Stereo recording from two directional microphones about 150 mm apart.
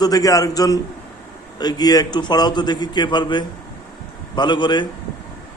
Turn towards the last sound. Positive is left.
turn(degrees=30)  # may be behind; listen again after turning